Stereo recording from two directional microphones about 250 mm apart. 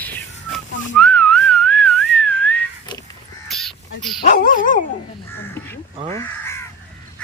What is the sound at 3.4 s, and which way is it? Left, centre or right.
Dog, centre.